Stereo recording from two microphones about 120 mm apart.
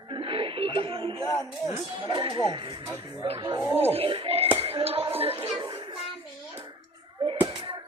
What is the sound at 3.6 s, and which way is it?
Speech, 20° right (ahead or behind).